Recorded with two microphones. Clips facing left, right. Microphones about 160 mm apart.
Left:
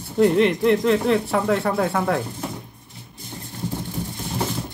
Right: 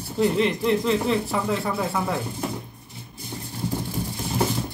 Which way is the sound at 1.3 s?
65° left (ahead or behind).